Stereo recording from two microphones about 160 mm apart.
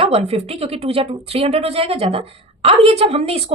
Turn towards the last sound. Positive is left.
turn(degrees=-40)  # may be behind; listen again after turning